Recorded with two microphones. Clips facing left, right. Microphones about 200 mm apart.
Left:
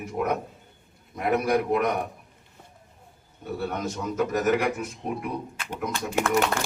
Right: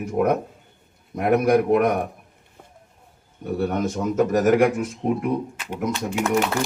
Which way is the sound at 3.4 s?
50° right (ahead or behind).